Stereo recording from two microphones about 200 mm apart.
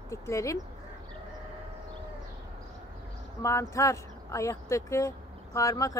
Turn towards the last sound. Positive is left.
turn(degrees=15)  # may be behind; listen again after turning